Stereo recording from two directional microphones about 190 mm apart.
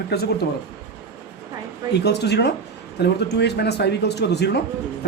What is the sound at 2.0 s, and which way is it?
Speech, 60° left (ahead or behind).